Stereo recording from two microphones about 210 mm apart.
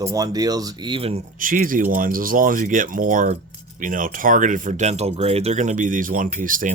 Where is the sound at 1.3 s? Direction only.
40° right (ahead or behind).